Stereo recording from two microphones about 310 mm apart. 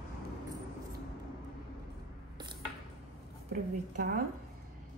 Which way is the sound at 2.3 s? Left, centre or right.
Centre.